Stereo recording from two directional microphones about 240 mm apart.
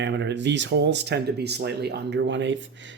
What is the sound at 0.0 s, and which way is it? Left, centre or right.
Speech, right.